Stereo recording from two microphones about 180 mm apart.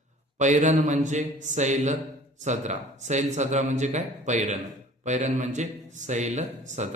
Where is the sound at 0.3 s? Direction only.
40° right (ahead or behind).